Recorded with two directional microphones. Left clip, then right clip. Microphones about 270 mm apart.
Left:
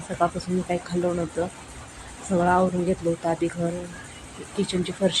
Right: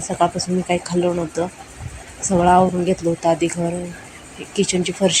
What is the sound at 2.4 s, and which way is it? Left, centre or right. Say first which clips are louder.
Speech: right 7 dB; centre.